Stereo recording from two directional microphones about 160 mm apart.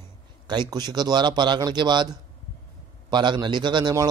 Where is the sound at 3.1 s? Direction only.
30° right (ahead or behind).